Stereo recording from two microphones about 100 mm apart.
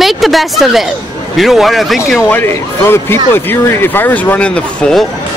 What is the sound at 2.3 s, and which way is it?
Speech, 25° left (ahead or behind).